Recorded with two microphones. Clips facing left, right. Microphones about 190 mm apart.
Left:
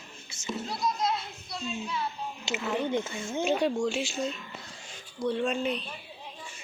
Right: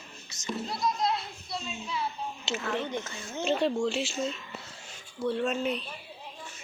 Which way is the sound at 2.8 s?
15° left (ahead or behind).